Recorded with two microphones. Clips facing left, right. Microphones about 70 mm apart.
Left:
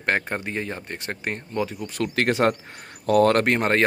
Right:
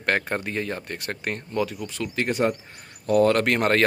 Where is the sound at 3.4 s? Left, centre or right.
Left.